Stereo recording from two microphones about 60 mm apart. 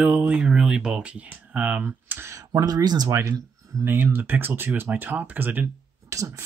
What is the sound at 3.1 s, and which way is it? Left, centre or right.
Speech, right.